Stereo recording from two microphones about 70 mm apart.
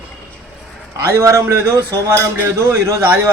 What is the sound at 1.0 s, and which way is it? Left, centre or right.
A man's voice, right.